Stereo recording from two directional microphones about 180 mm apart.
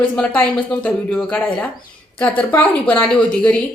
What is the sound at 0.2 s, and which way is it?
Speech, 10° left (ahead or behind).